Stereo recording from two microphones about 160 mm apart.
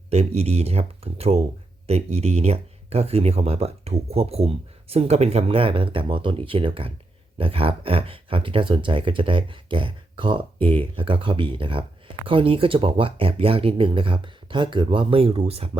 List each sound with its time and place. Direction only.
0.1 s speech: 40° right (ahead or behind)